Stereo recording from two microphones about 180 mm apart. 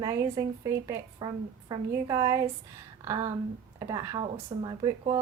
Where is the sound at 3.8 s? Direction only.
20° right (ahead or behind).